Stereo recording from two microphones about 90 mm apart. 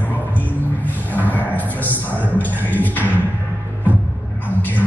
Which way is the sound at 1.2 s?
20° left (ahead or behind).